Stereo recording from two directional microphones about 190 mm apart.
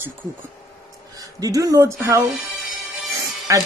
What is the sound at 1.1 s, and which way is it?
Speech, 20° right (ahead or behind).